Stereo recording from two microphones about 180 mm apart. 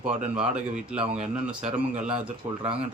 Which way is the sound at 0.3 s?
35° right (ahead or behind).